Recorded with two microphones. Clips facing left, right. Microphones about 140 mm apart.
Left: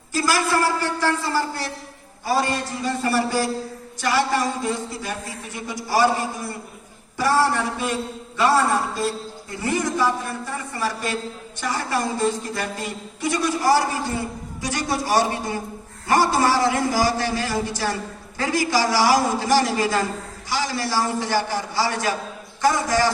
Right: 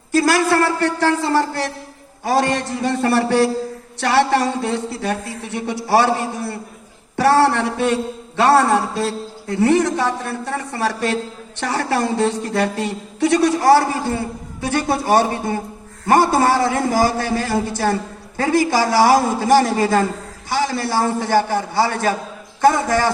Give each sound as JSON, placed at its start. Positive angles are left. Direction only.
{"t": 0.1, "sound": "a man's voice", "side_deg": -70}